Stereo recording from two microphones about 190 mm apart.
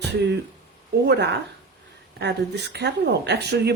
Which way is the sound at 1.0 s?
65° right (ahead or behind).